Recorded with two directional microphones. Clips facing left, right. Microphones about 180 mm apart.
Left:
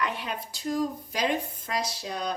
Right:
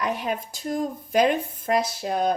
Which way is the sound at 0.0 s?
45° right (ahead or behind).